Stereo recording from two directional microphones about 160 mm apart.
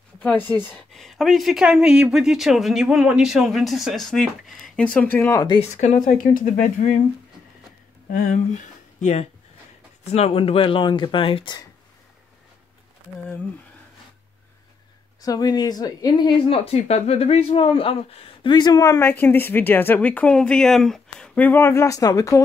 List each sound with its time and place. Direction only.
0.5 s speech: 25° right (ahead or behind)
0.9 s speech: centre (ahead or behind); by 5.6 s 20° left (ahead or behind)
5.6 s speech: 45° left (ahead or behind)
8.1 s speech: 50° left (ahead or behind); by 11.6 s 30° left (ahead or behind)
15.2 s speech: 25° left (ahead or behind)